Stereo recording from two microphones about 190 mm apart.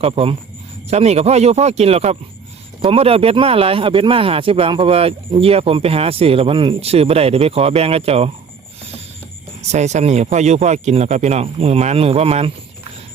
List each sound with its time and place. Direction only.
0.0 s speech: 30° right (ahead or behind)
9.6 s speech: 35° right (ahead or behind)